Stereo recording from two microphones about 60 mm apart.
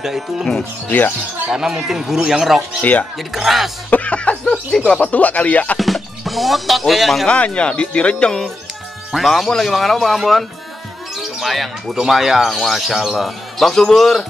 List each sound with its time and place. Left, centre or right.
0.0 s speech: centre
0.8 s speech: left
1.5 s speech: centre
2.8 s music: left
3.3 s a man's voice: centre
3.9 s a sound: left
4.7 s music: centre
5.8 s speech: centre
7.2 s speech: centre
9.1 s a man's voice: centre
11.4 s a man's voice: centre